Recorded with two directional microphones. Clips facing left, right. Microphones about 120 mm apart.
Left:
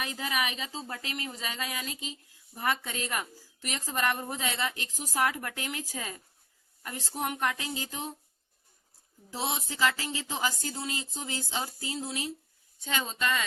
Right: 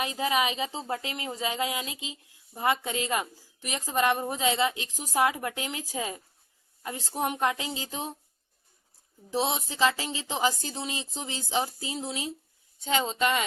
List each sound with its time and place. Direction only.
0.0 s speech: 20° right (ahead or behind)
9.3 s speech: 20° right (ahead or behind)